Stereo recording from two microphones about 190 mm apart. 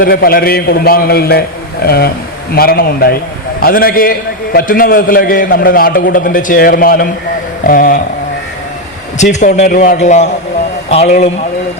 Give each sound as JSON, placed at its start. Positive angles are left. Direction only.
{"t": 0.0, "sound": "a man's voice", "side_deg": 50}
{"t": 9.1, "sound": "a man's voice", "side_deg": 40}